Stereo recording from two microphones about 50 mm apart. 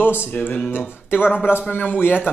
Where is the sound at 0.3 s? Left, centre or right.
Left.